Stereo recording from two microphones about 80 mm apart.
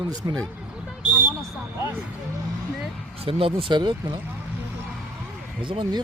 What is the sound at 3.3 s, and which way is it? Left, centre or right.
Speech, right.